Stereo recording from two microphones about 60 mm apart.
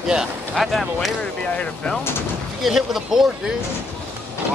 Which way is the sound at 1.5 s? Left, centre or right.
Left.